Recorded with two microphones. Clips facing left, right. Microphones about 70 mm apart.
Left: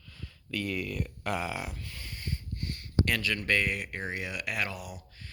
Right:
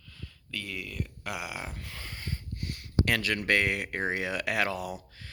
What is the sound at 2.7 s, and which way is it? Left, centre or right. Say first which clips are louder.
Speech: right 1 dB; right.